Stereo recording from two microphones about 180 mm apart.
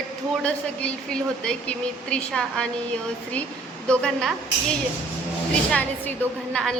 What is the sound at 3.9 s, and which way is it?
Speech, 5° left (ahead or behind).